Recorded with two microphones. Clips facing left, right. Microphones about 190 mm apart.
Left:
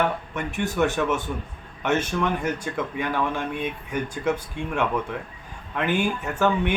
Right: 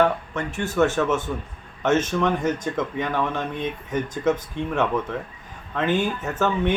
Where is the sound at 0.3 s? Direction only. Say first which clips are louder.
Right 2 dB; 15° left (ahead or behind).